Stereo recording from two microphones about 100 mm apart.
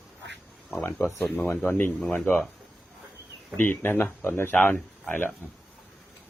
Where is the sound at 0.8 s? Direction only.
25° left (ahead or behind).